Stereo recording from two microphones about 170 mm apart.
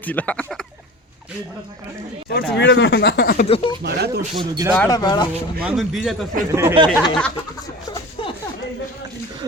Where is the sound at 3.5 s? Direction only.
30° left (ahead or behind).